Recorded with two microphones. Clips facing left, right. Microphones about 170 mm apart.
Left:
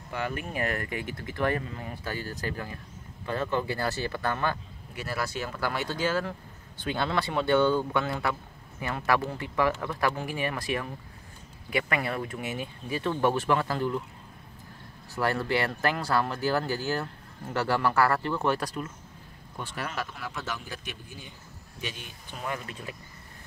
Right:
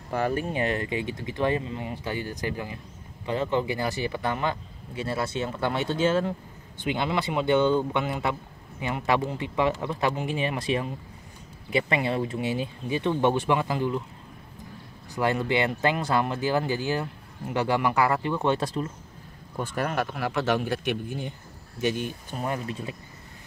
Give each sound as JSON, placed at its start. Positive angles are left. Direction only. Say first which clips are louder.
{"t": 0.1, "sound": "speech", "louder": "right 6 dB", "side_deg": -40}
{"t": 15.1, "sound": "speech", "louder": "right 3 dB", "side_deg": -20}
{"t": 19.5, "sound": "speech", "louder": "right 7 dB", "side_deg": -45}